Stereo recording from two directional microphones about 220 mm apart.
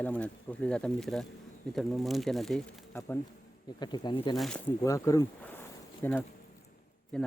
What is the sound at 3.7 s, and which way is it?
Speech, 20° left (ahead or behind).